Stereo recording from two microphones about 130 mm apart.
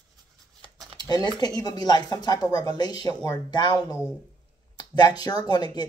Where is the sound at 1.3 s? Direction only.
30° left (ahead or behind).